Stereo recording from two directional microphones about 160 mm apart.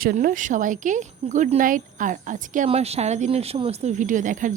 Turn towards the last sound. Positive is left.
turn(degrees=-55)  # may be behind; listen again after turning